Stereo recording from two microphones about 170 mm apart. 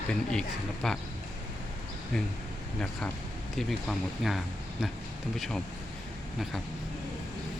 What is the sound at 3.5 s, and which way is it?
Speech, centre (ahead or behind).